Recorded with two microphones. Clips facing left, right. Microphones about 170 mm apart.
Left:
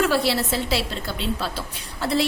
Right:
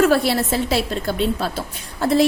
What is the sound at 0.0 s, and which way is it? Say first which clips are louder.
A woman's voice: right 5 dB; 50° right (ahead or behind).